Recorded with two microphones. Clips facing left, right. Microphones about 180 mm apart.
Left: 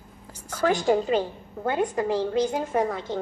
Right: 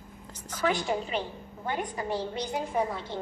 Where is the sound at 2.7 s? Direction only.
65° left (ahead or behind).